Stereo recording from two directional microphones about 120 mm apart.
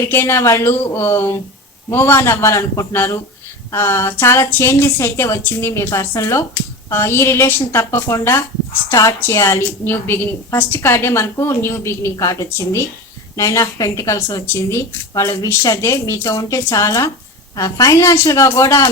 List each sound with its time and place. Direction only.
0.1 s a woman's voice: 20° left (ahead or behind)